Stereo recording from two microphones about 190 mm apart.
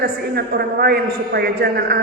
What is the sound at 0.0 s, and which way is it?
A man's voice, 55° right (ahead or behind).